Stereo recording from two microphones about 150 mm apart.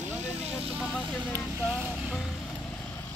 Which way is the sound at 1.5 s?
15° right (ahead or behind).